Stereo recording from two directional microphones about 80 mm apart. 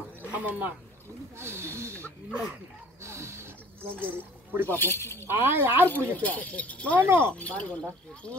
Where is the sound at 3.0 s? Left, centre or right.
Right.